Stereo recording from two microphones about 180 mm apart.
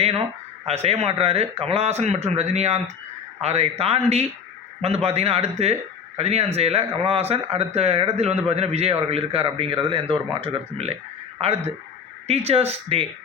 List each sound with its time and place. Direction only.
0.6 s a man's voice: 35° right (ahead or behind)